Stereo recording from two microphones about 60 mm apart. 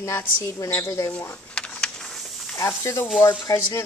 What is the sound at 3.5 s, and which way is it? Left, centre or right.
Speech, left.